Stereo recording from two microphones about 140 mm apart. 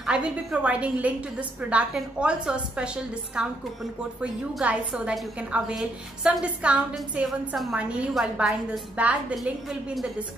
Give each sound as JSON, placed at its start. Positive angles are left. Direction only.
{"t": 0.0, "sound": "a woman's voice", "side_deg": -5}